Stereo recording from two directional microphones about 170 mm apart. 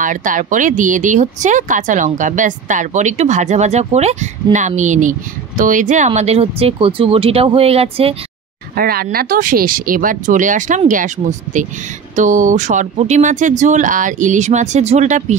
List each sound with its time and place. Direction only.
0.0 s speech: 50° right (ahead or behind); by 8.2 s 35° right (ahead or behind)
8.7 s speech: 60° right (ahead or behind); by 15.3 s 45° right (ahead or behind)